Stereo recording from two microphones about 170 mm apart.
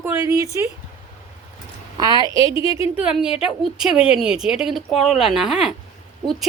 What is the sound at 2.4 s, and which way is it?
Speech, 30° left (ahead or behind).